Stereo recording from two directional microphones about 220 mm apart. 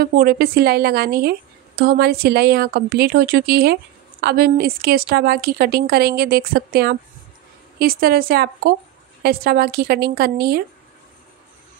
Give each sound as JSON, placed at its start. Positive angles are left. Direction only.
{"t": 0.0, "sound": "a woman's voice", "side_deg": -45}